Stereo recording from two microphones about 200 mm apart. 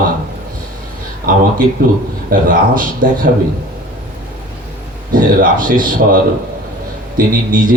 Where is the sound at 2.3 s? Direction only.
40° right (ahead or behind).